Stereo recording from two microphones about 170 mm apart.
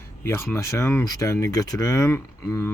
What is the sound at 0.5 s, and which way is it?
Speech, 15° left (ahead or behind).